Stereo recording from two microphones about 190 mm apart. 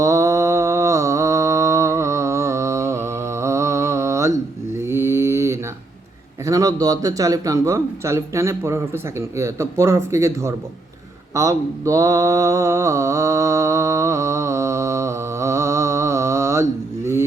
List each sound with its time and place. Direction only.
0.0 s mantra: 15° right (ahead or behind)
6.4 s a man's voice: 20° right (ahead or behind)
11.3 s mantra: 15° right (ahead or behind)